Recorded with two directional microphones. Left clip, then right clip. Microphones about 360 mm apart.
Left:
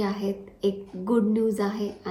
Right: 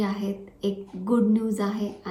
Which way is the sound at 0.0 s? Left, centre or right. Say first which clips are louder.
Left 1 dB; centre.